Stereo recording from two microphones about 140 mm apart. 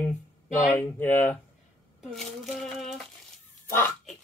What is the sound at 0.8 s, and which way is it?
Speech, 15° left (ahead or behind).